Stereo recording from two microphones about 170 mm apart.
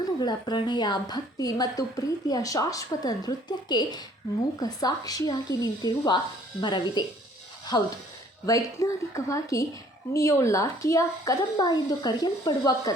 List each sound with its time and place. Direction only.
0.2 s a woman's voice: 25° left (ahead or behind)